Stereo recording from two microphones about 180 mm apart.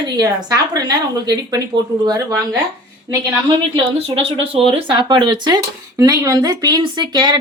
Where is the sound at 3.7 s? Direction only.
30° right (ahead or behind).